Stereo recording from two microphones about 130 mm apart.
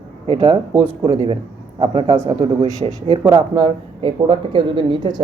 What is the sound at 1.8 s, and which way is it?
Speech, 45° right (ahead or behind).